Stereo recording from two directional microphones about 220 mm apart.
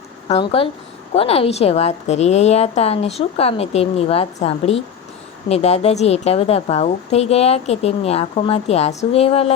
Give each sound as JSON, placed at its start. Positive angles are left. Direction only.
{"t": 0.3, "sound": "a woman's voice", "side_deg": 25}